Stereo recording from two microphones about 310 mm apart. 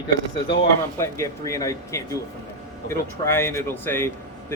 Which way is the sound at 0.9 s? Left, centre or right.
Centre.